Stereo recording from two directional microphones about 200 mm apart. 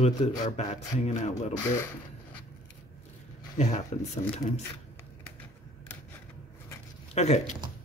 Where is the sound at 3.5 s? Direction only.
35° left (ahead or behind).